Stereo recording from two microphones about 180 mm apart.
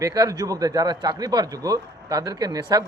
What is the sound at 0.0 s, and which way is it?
A man's voice, 20° right (ahead or behind).